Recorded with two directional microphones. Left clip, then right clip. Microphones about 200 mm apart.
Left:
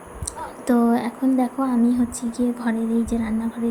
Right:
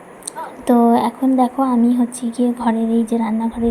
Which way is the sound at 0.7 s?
15° right (ahead or behind).